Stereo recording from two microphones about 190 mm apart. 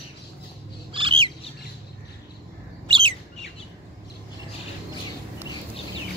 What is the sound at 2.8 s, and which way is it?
Bird, 25° right (ahead or behind).